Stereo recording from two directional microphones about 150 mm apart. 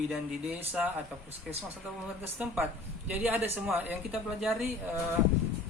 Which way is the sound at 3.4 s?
15° right (ahead or behind).